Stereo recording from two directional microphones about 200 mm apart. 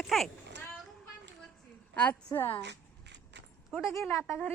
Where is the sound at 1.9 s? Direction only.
10° left (ahead or behind).